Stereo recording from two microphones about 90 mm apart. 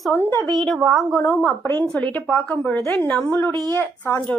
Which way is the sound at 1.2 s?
25° left (ahead or behind).